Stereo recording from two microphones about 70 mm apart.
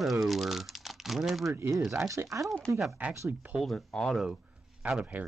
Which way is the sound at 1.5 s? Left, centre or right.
Right.